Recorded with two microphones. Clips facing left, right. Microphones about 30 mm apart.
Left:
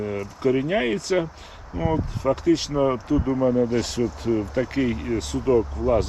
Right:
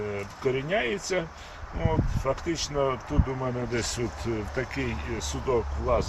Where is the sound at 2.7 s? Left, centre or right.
Centre.